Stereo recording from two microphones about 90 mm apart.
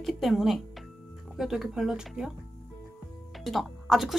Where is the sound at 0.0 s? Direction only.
Centre (ahead or behind).